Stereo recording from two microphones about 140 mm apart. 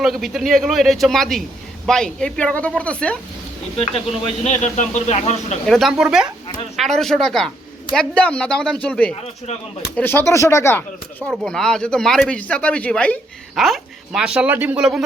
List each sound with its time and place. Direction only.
0.0 s a woman's voice: centre (ahead or behind)
4.4 s speech: 60° left (ahead or behind)
5.6 s a woman's voice: centre (ahead or behind); by 10.8 s 20° left (ahead or behind)
11.3 s speech: 5° left (ahead or behind); by 14.8 s 10° right (ahead or behind)